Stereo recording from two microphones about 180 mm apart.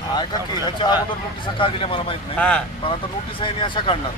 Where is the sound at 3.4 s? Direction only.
25° left (ahead or behind).